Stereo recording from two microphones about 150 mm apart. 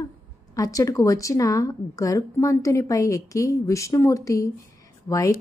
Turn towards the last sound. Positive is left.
turn(degrees=20)  # may be behind; listen again after turning